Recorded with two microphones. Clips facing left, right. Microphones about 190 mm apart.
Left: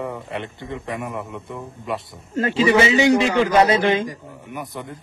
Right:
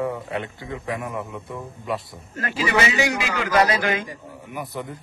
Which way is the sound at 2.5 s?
25° left (ahead or behind).